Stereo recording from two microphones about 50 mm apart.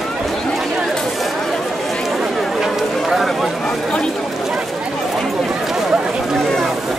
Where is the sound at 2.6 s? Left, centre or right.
Centre.